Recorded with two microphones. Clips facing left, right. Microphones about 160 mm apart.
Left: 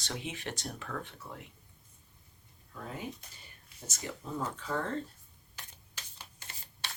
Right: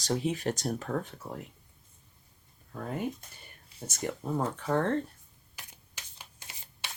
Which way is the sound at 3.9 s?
55° right (ahead or behind).